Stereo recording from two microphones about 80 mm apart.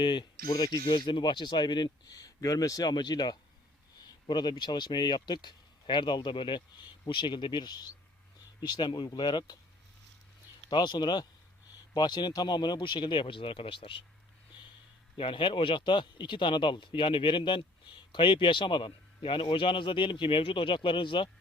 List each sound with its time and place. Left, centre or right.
0.0 s speech: left
10.7 s speech: left
15.2 s a man's voice: left